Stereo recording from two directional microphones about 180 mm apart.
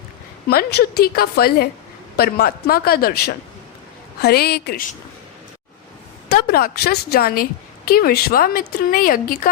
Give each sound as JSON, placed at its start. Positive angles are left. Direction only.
{"t": 0.4, "sound": "a woman's voice", "side_deg": 60}
{"t": 6.2, "sound": "a woman's voice", "side_deg": 60}